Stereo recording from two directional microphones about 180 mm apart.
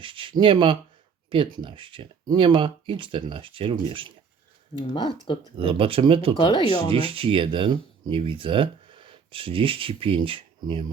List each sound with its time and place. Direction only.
0.0 s speech: 30° right (ahead or behind)
4.8 s speech: 25° left (ahead or behind)
5.5 s speech: 30° right (ahead or behind)
6.3 s speech: 25° left (ahead or behind)
6.9 s speech: 30° right (ahead or behind)